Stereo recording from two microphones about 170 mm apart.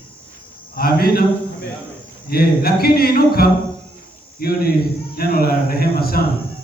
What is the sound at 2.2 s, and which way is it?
A man's voice, 65° left (ahead or behind).